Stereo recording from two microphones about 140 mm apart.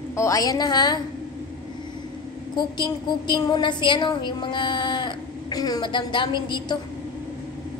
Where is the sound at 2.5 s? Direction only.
35° left (ahead or behind).